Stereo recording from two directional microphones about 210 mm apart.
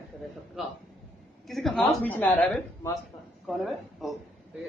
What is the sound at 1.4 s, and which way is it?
A woman's voice, centre (ahead or behind).